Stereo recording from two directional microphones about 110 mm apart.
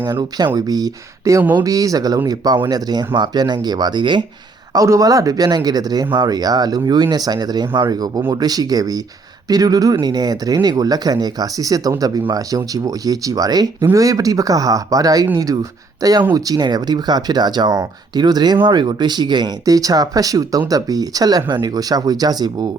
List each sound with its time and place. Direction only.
0.1 s speech: 40° right (ahead or behind)
4.7 s speech: 30° right (ahead or behind)